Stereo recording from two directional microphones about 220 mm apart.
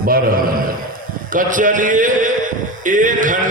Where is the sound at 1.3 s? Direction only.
35° right (ahead or behind).